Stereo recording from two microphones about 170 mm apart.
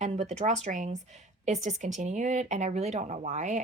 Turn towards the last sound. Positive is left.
turn(degrees=-45)  # may be behind; listen again after turning